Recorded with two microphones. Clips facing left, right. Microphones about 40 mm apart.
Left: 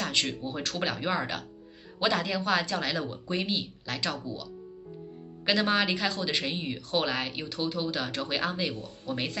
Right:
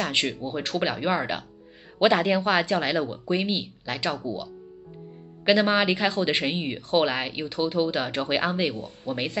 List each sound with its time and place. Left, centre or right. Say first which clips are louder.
0.0 s speech: right 4 dB; right
5.4 s speech: right 5 dB; centre